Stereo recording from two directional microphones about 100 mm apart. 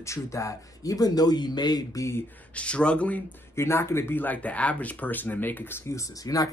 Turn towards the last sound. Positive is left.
turn(degrees=35)  # may be behind; listen again after turning